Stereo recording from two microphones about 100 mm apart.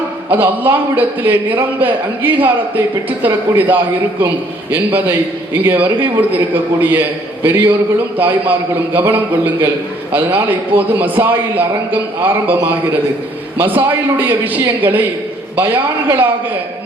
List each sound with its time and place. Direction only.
0.3 s a man's voice: 20° right (ahead or behind)
5.6 s a man's voice: 20° right (ahead or behind)
13.6 s a man's voice: 20° right (ahead or behind)
16.0 s a man's voice: 20° right (ahead or behind)